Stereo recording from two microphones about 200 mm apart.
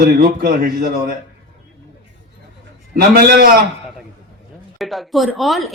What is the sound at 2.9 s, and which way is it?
Speech, 50° right (ahead or behind).